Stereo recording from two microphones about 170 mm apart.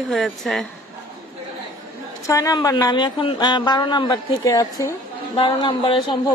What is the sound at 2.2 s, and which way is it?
Speech, 20° left (ahead or behind).